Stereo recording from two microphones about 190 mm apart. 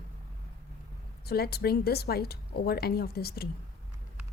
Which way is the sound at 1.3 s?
55° left (ahead or behind).